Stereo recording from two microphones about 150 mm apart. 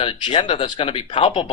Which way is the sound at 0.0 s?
35° left (ahead or behind).